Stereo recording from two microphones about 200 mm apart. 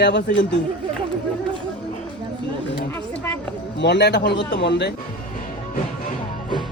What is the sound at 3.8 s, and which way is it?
Speech, 60° left (ahead or behind).